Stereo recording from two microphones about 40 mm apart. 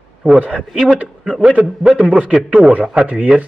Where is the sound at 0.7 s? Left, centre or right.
Centre.